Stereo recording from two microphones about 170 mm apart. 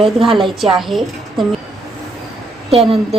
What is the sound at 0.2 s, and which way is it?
A woman's voice, centre (ahead or behind).